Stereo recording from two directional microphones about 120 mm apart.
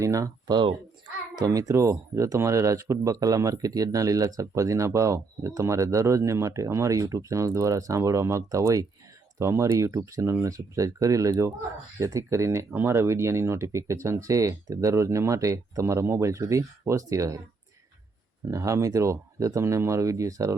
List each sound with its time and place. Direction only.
0.0 s speech: 25° right (ahead or behind)
1.4 s speech: 30° right (ahead or behind)
18.4 s speech: 25° right (ahead or behind)